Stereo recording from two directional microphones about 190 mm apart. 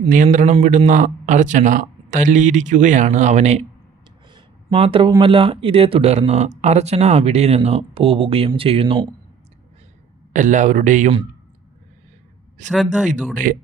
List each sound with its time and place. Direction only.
0.1 s speech: 40° right (ahead or behind)
4.3 s a sound: 25° right (ahead or behind)
5.2 s speech: 30° right (ahead or behind)
10.3 s speech: 40° right (ahead or behind)
12.7 s speech: centre (ahead or behind)
13.3 s speech: 45° right (ahead or behind)